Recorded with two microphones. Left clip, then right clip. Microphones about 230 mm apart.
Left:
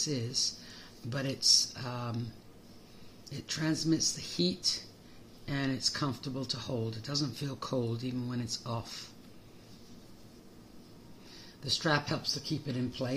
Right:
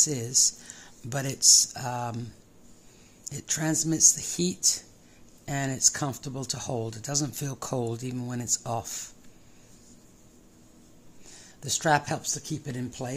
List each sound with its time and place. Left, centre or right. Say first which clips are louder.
0.0 s speech: right 8 dB; right
3.3 s speech: right 4 dB; right
11.6 s speech: right 6 dB; right